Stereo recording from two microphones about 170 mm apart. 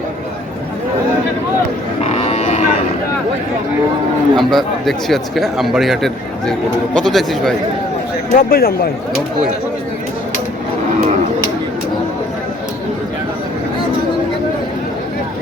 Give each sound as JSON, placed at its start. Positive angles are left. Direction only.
{"t": 2.0, "sound": "a sound", "side_deg": 40}
{"t": 4.4, "sound": "speech", "side_deg": 0}
{"t": 8.4, "sound": "speech", "side_deg": 60}